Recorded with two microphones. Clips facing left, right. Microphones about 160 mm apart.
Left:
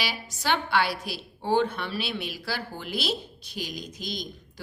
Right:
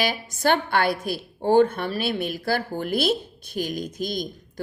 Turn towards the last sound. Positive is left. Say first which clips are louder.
# right 7 dB
turn(degrees=-50)  # may be behind; listen again after turning